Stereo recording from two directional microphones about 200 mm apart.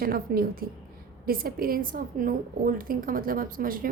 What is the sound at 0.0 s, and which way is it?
A woman's voice, 45° right (ahead or behind).